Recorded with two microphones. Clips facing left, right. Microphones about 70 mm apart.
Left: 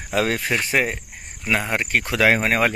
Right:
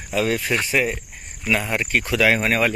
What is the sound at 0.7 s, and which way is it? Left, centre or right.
Speech, left.